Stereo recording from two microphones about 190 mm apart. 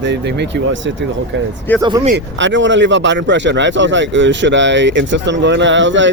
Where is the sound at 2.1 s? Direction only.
75° right (ahead or behind).